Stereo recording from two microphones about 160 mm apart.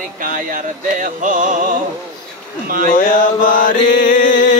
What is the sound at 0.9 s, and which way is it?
Music, 55° right (ahead or behind).